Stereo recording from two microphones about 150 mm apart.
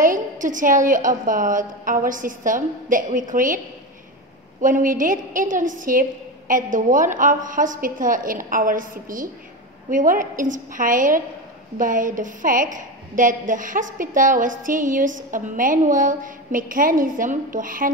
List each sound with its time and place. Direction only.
0.0 s a woman's voice: 60° right (ahead or behind)